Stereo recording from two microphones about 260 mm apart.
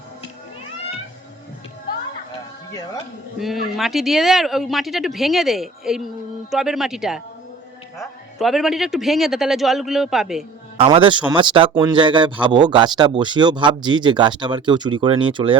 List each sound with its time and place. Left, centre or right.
3.3 s speech: centre
10.8 s speech: centre
11.7 s a man's voice: centre
11.9 s a man's voice: centre